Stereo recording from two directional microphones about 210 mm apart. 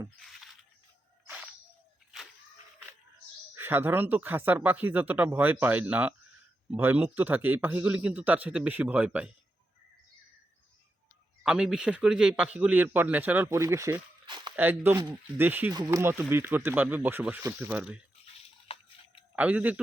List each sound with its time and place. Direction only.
3.5 s speech: 10° right (ahead or behind)
11.4 s speech: 5° right (ahead or behind); by 14.5 s 20° right (ahead or behind)
14.5 s speech: 10° right (ahead or behind)
19.4 s speech: 5° right (ahead or behind)